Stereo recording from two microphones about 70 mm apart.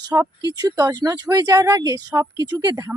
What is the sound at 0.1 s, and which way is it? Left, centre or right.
Speech, right.